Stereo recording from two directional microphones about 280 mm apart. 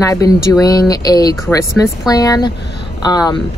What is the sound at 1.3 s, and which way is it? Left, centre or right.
Speech, centre.